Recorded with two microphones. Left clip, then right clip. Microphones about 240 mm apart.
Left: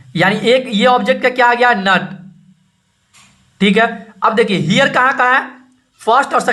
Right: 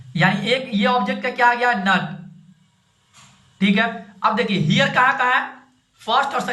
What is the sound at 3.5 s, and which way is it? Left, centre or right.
A man's voice, left.